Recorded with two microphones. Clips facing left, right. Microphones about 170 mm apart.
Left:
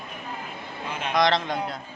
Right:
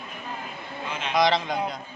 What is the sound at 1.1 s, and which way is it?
Speech, centre (ahead or behind).